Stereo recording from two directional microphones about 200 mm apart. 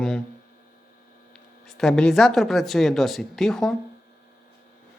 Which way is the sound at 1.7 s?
Centre (ahead or behind).